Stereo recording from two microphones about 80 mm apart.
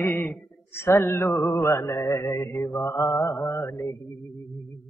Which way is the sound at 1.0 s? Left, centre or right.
Left.